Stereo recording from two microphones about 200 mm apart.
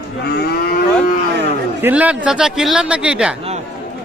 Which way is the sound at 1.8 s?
5° right (ahead or behind).